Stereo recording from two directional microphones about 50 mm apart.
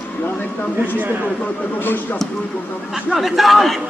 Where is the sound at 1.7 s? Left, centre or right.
Left.